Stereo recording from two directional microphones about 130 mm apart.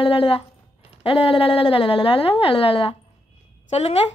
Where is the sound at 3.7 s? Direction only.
55° left (ahead or behind).